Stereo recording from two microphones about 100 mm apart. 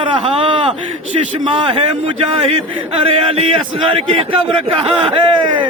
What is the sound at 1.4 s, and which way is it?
A man's voice, 60° right (ahead or behind).